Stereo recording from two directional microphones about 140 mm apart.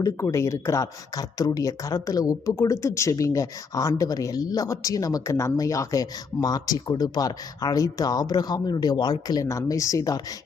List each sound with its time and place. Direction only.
0.0 s speech: 20° left (ahead or behind)